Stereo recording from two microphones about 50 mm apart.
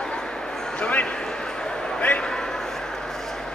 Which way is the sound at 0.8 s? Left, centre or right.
Left.